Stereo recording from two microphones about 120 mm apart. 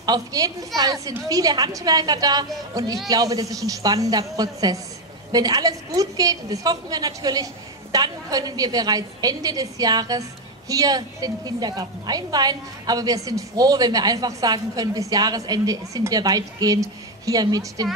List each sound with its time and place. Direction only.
0.0 s a woman's voice: 35° right (ahead or behind)